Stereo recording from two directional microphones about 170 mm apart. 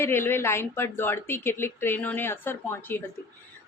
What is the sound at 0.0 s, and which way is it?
A woman's voice, 15° left (ahead or behind).